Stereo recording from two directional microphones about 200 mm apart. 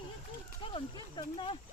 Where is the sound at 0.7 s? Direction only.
25° left (ahead or behind).